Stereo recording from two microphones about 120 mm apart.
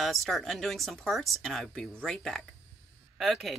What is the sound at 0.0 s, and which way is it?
Speech, centre (ahead or behind).